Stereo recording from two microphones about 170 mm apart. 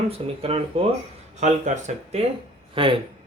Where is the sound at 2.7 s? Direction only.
30° right (ahead or behind).